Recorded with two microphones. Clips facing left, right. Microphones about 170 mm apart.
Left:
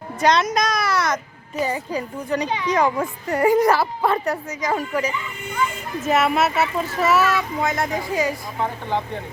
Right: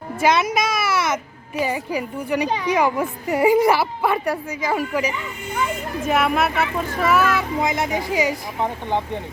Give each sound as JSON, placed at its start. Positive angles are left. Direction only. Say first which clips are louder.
{"t": 0.2, "sound": "a child's voice", "louder": "even", "side_deg": -5}
{"t": 6.1, "sound": "speech", "louder": "left 1 dB", "side_deg": 0}
{"t": 7.6, "sound": "a woman's voice", "louder": "right 1 dB", "side_deg": -15}